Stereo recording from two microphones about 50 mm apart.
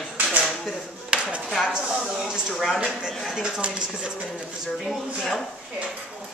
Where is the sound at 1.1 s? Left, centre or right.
Centre.